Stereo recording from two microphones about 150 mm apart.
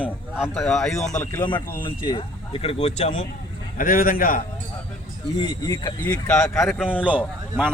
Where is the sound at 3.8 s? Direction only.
70° left (ahead or behind).